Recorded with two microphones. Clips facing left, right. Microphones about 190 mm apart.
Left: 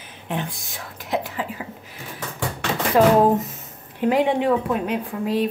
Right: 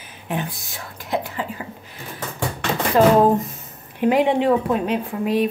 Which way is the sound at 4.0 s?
20° right (ahead or behind).